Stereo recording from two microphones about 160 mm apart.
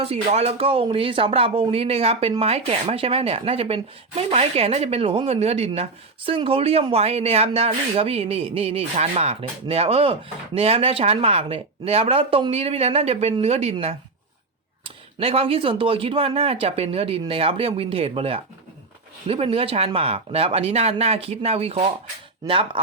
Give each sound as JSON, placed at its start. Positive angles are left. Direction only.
{"t": 0.0, "sound": "speech", "side_deg": -40}